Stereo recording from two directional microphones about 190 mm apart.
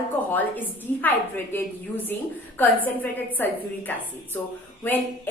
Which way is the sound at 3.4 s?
10° left (ahead or behind).